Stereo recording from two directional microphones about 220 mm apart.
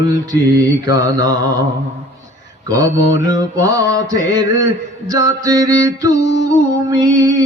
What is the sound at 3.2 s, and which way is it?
Music, 15° right (ahead or behind).